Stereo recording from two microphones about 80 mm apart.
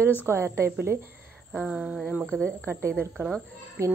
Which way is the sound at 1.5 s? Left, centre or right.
Centre.